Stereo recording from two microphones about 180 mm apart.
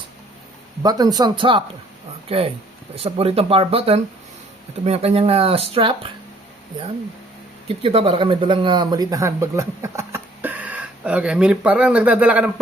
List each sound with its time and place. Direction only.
0.8 s speech: 20° right (ahead or behind)
7.7 s speech: 35° right (ahead or behind); by 12.5 s 10° right (ahead or behind)